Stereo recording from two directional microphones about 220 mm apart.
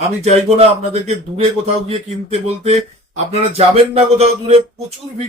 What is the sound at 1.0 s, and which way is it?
Speech, 30° right (ahead or behind).